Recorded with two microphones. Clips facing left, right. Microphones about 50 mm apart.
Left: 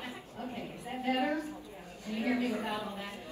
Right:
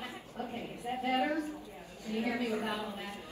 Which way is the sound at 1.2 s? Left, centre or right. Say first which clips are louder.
Left 1 dB; left.